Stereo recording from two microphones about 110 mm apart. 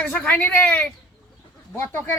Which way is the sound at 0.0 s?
10° left (ahead or behind).